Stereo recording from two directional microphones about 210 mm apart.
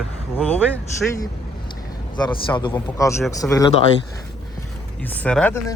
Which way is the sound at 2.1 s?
20° left (ahead or behind).